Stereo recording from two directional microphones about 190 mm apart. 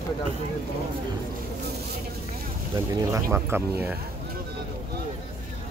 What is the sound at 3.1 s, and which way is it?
Speech, 10° right (ahead or behind).